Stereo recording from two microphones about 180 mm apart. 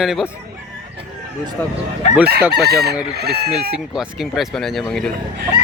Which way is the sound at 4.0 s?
Centre (ahead or behind).